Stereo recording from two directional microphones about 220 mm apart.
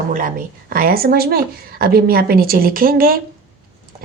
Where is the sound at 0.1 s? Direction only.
40° right (ahead or behind).